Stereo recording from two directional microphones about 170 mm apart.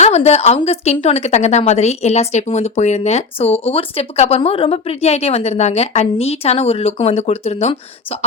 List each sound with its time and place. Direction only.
0.0 s a woman's voice: 40° left (ahead or behind)